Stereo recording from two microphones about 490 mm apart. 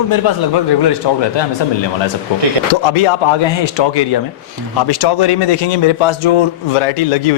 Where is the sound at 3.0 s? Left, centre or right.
Left.